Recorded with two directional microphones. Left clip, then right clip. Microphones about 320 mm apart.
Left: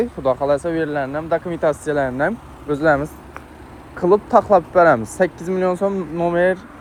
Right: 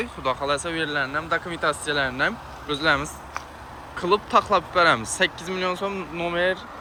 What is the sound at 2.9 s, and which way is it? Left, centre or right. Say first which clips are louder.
Speech: left 5 dB; centre.